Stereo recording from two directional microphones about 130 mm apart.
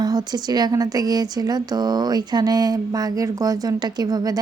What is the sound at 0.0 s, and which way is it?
Speech, 30° right (ahead or behind).